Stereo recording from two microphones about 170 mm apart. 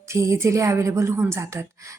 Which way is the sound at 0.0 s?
15° right (ahead or behind).